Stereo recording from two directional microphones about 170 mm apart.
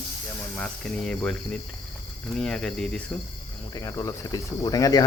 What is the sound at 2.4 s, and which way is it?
Speech, 5° left (ahead or behind).